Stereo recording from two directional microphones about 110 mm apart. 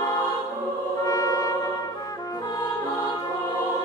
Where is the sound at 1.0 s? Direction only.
30° left (ahead or behind).